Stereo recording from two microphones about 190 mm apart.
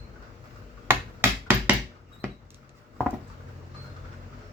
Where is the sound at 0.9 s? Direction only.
10° right (ahead or behind).